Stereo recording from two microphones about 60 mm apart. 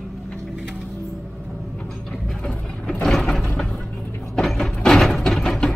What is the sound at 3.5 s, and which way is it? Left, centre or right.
Vehicle, centre.